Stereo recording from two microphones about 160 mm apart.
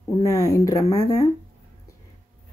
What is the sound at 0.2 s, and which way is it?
Speech, 20° left (ahead or behind).